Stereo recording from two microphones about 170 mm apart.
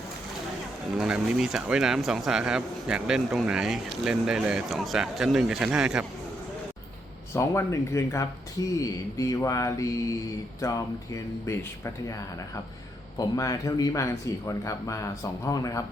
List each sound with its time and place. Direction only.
0.9 s speech: 5° right (ahead or behind)
7.3 s speech: 15° left (ahead or behind)
13.1 s speech: 20° left (ahead or behind)